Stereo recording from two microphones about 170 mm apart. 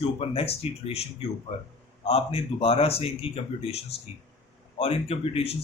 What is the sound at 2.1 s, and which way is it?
Speech, 35° left (ahead or behind).